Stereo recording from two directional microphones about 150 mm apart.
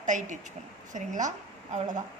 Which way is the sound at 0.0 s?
55° right (ahead or behind).